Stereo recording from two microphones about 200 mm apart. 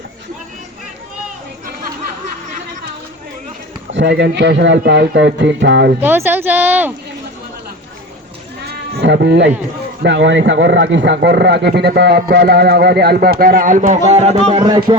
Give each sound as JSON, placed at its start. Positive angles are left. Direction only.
{"t": 3.9, "sound": "speech", "side_deg": -65}
{"t": 6.0, "sound": "speech", "side_deg": -10}
{"t": 8.6, "sound": "sheep", "side_deg": -55}
{"t": 10.0, "sound": "speech", "side_deg": -65}
{"t": 14.6, "sound": "speech", "side_deg": -20}